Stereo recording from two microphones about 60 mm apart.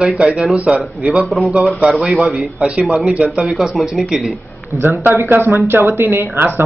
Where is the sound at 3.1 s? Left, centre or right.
Centre.